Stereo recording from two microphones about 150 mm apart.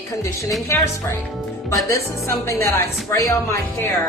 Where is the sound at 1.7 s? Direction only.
20° left (ahead or behind).